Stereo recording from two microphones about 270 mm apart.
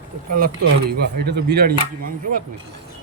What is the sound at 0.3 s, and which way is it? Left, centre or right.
Speech, right.